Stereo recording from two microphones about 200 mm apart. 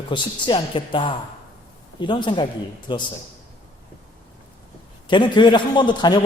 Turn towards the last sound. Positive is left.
turn(degrees=20)  # may be behind; listen again after turning